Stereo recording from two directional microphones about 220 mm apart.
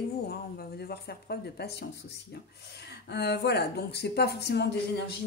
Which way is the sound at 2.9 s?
50° left (ahead or behind).